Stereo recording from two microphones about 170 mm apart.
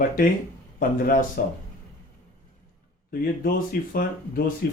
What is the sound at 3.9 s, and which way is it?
Speech, 60° left (ahead or behind).